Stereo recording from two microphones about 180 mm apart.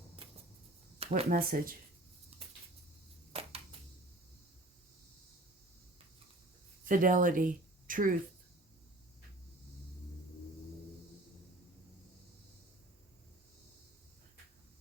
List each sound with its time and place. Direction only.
0.9 s a sound: 35° right (ahead or behind)
1.3 s speech: 55° right (ahead or behind)
6.8 s speech: 50° right (ahead or behind)